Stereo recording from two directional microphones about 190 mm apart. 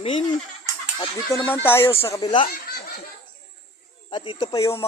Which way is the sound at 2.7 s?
55° left (ahead or behind).